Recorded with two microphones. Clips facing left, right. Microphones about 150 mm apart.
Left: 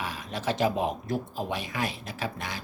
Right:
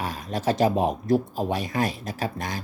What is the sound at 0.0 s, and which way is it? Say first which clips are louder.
Speech: right 5 dB; 40° right (ahead or behind).